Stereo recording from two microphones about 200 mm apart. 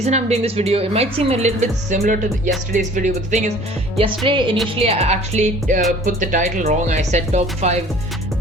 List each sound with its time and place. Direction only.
0.0 s a woman's voice: 35° right (ahead or behind)
4.3 s music: 25° right (ahead or behind)
4.8 s a woman's voice: 30° right (ahead or behind)